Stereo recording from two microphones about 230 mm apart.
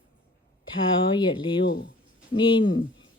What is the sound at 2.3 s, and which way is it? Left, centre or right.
Speech, left.